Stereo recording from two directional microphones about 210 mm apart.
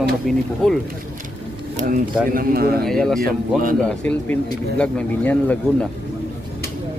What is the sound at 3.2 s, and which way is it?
Speech, 45° right (ahead or behind).